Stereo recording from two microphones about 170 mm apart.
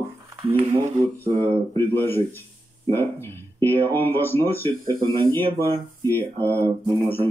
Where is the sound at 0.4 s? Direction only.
35° right (ahead or behind).